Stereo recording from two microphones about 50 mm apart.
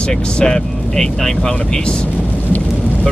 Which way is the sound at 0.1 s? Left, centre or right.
Centre.